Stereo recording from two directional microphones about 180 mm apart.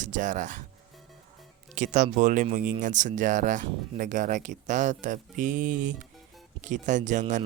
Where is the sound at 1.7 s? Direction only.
45° right (ahead or behind).